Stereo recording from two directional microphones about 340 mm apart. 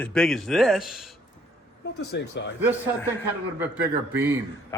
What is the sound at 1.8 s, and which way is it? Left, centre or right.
Speech, left.